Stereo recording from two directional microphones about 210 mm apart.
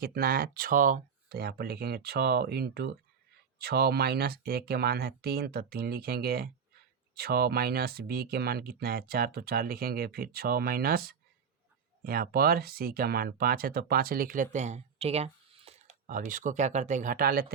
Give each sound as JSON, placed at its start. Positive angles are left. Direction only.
{"t": 0.0, "sound": "speech", "side_deg": -45}